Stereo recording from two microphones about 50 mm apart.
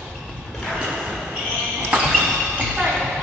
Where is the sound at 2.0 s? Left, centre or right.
Centre.